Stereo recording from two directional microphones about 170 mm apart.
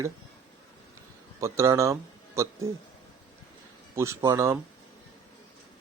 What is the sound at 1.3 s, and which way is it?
Speech, 15° right (ahead or behind).